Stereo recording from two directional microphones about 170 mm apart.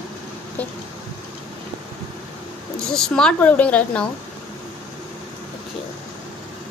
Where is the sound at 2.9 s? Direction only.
5° left (ahead or behind).